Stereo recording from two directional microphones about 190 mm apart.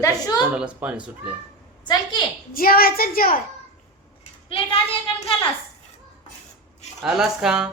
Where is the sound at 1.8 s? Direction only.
25° left (ahead or behind).